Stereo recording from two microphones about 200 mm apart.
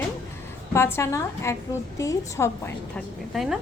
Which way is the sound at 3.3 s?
Centre (ahead or behind).